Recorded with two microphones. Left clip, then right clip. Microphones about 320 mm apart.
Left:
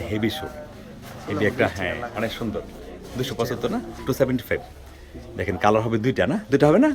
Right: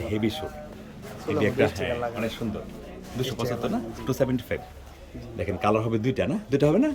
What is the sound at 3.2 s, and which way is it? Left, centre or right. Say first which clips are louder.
Speech: left 3 dB; centre.